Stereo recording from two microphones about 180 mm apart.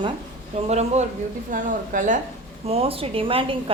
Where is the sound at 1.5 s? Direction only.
50° right (ahead or behind).